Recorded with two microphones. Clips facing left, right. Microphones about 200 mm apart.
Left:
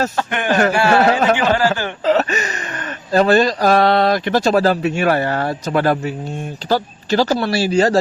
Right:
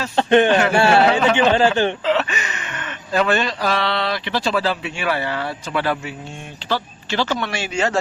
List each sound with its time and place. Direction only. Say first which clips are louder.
0.2 s speech: right 7 dB; 25° right (ahead or behind)
2.0 s speech: left 4 dB; 40° left (ahead or behind)